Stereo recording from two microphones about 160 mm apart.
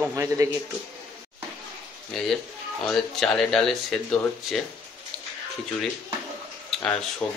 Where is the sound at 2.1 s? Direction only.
Centre (ahead or behind).